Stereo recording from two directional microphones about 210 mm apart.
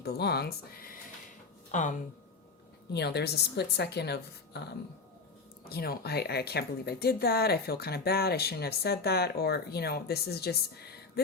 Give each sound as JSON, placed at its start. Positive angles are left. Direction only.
{"t": 0.0, "sound": "a woman's voice", "side_deg": 50}
{"t": 2.9, "sound": "speech", "side_deg": 50}
{"t": 5.6, "sound": "speech", "side_deg": 45}